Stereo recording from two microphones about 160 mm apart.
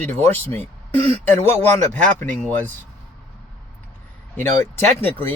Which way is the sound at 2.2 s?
10° left (ahead or behind).